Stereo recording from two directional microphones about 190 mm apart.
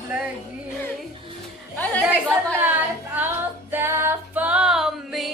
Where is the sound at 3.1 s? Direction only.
10° right (ahead or behind).